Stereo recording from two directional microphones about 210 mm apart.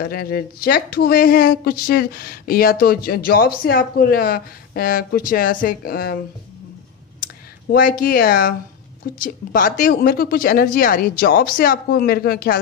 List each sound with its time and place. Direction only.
0.0 s speech: 45° left (ahead or behind)
7.7 s speech: 45° left (ahead or behind)